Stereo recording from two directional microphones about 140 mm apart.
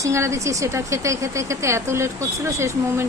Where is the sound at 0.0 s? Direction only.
20° right (ahead or behind).